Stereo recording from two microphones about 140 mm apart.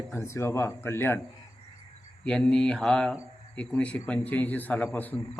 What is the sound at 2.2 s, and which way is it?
Speech, 5° left (ahead or behind).